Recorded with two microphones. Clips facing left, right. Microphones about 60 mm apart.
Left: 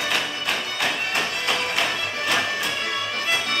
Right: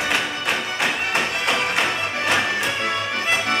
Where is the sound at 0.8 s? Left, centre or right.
Right.